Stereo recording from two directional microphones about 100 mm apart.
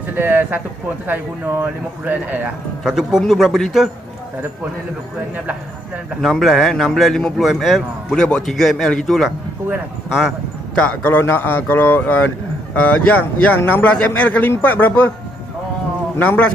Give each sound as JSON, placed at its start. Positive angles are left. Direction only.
{"t": 0.1, "sound": "speech", "side_deg": -20}
{"t": 2.8, "sound": "a man's voice", "side_deg": -5}
{"t": 6.2, "sound": "a man's voice", "side_deg": 0}
{"t": 10.8, "sound": "speech", "side_deg": 20}
{"t": 16.2, "sound": "speech", "side_deg": 15}